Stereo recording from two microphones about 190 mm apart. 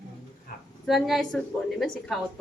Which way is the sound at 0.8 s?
Centre (ahead or behind).